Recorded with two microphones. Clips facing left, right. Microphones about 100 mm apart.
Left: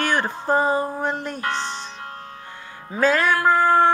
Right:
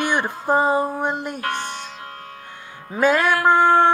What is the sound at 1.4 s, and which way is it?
Music, 55° right (ahead or behind).